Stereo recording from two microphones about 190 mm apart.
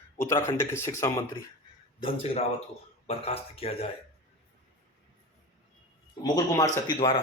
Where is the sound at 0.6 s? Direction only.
15° left (ahead or behind).